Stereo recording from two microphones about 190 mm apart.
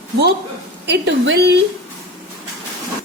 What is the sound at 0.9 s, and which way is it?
Speech, 65° right (ahead or behind).